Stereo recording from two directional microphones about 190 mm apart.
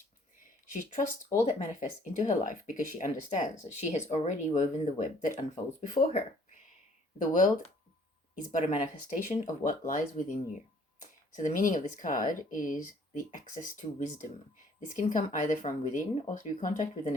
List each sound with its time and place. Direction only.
0.7 s speech: 40° left (ahead or behind)
8.5 s speech: 40° left (ahead or behind)